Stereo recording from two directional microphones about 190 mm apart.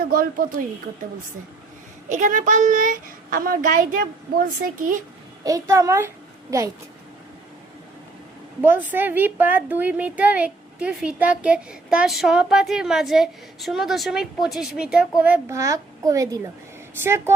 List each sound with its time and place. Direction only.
0.1 s a woman's voice: 50° right (ahead or behind)
2.0 s a woman's voice: 40° right (ahead or behind)
5.4 s a child's voice: 15° right (ahead or behind)
8.6 s a woman's voice: 10° right (ahead or behind)